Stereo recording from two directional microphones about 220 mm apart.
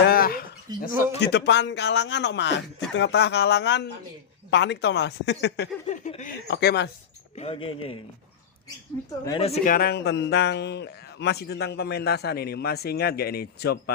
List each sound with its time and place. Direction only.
0.1 s a sound: 40° left (ahead or behind)
0.9 s a man's voice: 50° left (ahead or behind)
5.8 s a sound: 30° left (ahead or behind)
6.5 s a man's voice: 50° left (ahead or behind)
7.3 s speech: 25° left (ahead or behind)
9.0 s a woman's voice: 15° left (ahead or behind)
9.4 s speech: 30° left (ahead or behind)
9.7 s a man's voice: 45° left (ahead or behind)